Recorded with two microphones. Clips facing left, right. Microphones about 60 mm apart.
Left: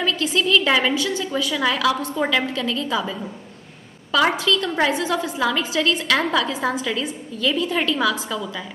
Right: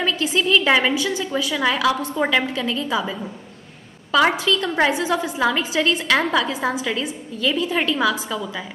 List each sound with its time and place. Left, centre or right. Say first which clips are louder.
0.0 s a woman's voice: even; centre